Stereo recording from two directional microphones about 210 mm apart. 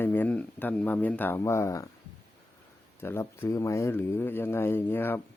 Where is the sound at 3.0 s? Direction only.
10° left (ahead or behind).